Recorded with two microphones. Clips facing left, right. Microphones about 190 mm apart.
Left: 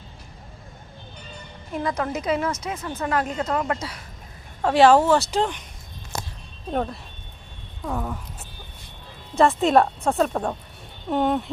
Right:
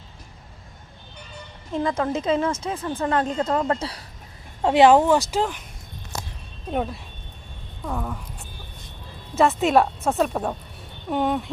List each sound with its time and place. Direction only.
1.7 s speech: 25° right (ahead or behind)
4.6 s speech: 20° right (ahead or behind)
6.7 s speech: 5° right (ahead or behind)
9.3 s speech: centre (ahead or behind)